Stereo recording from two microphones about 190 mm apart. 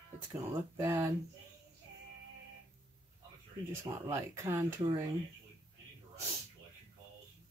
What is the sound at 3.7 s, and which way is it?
Speech, 15° right (ahead or behind).